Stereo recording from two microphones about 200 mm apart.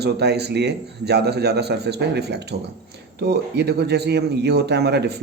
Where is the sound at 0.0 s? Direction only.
55° right (ahead or behind).